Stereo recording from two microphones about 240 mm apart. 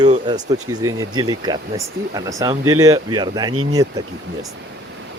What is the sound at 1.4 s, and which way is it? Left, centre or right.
Speech, centre.